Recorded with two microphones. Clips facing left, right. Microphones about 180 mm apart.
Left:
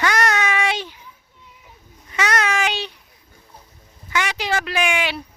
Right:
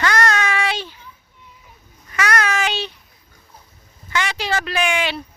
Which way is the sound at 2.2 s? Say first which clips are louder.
Even; 20° left (ahead or behind).